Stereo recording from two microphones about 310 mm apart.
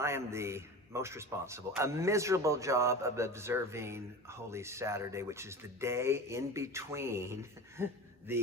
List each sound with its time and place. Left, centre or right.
0.0 s a man's voice: centre